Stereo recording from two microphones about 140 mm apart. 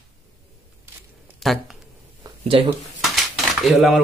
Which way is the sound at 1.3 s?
Centre (ahead or behind).